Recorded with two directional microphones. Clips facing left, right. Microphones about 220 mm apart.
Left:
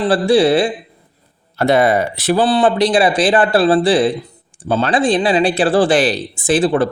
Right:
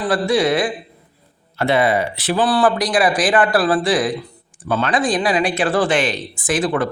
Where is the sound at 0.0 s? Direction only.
30° left (ahead or behind).